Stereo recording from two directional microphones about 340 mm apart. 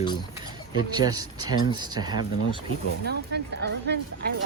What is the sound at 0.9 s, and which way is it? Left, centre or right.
Speech, centre.